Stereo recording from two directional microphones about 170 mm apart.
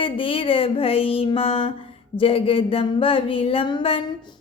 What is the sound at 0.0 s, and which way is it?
A woman's voice, 30° left (ahead or behind).